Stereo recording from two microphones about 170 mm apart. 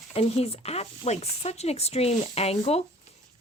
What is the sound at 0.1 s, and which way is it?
A woman's voice, 35° left (ahead or behind).